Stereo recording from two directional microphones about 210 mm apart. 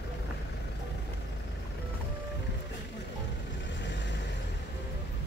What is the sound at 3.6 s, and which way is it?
Vehicle, 55° left (ahead or behind).